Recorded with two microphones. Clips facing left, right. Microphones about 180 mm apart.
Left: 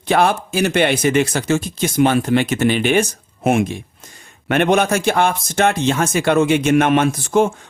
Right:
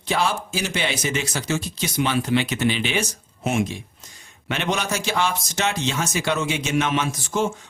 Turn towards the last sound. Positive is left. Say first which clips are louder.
# left 8 dB
turn(degrees=55)  # may be behind; listen again after turning